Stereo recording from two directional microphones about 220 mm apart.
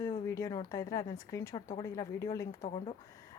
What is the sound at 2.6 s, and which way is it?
Speech, 25° left (ahead or behind).